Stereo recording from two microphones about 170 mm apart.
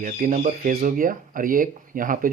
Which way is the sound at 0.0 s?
50° right (ahead or behind).